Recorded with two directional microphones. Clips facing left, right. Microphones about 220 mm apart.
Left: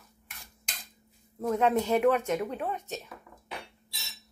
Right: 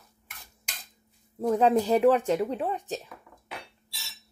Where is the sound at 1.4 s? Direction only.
35° right (ahead or behind).